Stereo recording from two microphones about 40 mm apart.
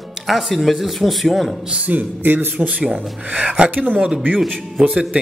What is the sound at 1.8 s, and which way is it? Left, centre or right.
Speech, right.